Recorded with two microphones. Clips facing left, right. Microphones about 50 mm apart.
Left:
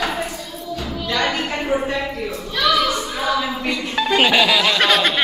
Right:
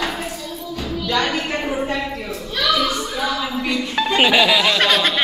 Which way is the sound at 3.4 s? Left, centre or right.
Centre.